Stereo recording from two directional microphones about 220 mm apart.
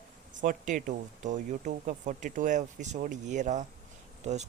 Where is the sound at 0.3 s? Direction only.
35° right (ahead or behind).